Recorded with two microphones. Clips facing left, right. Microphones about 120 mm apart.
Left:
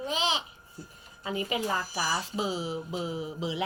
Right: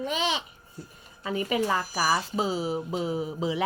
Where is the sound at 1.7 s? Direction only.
70° right (ahead or behind).